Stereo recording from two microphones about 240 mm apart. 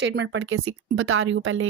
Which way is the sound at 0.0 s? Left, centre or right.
Right.